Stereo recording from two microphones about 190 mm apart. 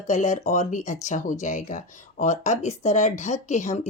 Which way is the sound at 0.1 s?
40° left (ahead or behind).